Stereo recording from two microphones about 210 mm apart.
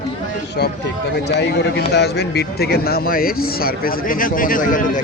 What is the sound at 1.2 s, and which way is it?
A man's voice, 55° left (ahead or behind).